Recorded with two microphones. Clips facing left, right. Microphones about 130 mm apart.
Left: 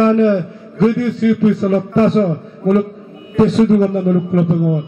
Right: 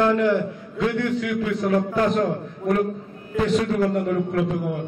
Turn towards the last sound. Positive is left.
turn(degrees=30)  # may be behind; listen again after turning